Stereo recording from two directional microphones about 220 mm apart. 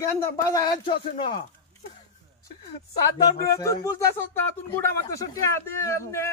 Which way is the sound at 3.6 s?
15° left (ahead or behind).